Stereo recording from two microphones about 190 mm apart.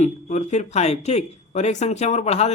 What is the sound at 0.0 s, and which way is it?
Speech, 40° left (ahead or behind).